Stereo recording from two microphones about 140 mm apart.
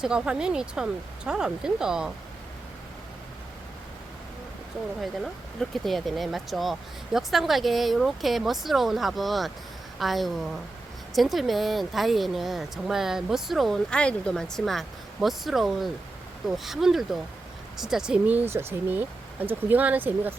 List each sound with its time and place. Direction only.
0.0 s speech: 5° right (ahead or behind)
5.2 s speech: centre (ahead or behind)